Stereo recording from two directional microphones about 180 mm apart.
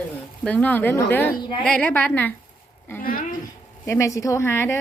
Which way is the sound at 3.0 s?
50° left (ahead or behind).